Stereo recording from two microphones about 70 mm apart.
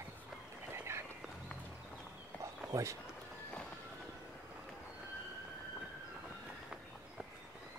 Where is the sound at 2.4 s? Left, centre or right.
Right.